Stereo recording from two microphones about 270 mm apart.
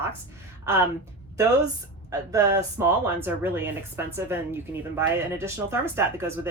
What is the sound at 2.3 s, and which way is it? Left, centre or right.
Speech, centre.